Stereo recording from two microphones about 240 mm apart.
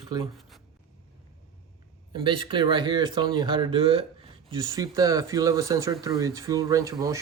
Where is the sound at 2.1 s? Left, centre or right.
Right.